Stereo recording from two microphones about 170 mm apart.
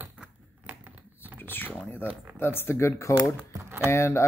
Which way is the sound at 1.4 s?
10° left (ahead or behind).